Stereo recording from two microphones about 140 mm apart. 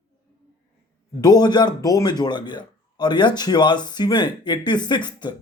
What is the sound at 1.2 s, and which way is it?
Speech, 30° left (ahead or behind).